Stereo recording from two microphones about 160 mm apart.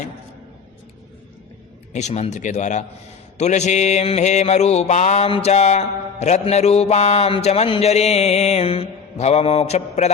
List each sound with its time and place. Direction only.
1.9 s mantra: 45° left (ahead or behind)